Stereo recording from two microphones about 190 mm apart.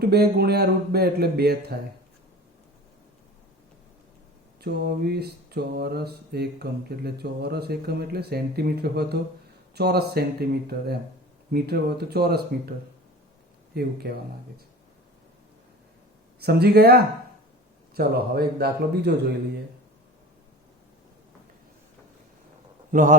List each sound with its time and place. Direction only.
0.1 s mantra: 55° right (ahead or behind)
4.6 s mantra: 60° right (ahead or behind)
13.7 s mantra: 55° right (ahead or behind)
16.4 s mantra: 55° right (ahead or behind)
22.9 s a man's voice: 45° right (ahead or behind)